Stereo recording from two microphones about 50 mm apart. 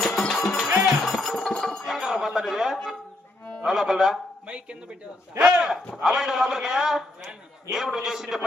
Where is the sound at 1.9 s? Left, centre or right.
Centre.